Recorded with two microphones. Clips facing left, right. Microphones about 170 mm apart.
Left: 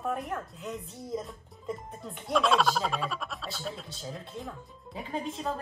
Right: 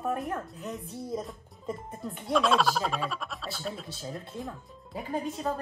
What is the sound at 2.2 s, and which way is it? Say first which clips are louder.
Speech: even; centre (ahead or behind).